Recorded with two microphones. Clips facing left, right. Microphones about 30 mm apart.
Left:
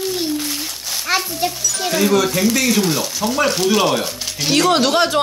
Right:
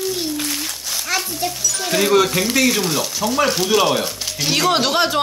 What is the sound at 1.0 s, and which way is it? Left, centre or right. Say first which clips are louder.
Speech: left 4 dB; centre.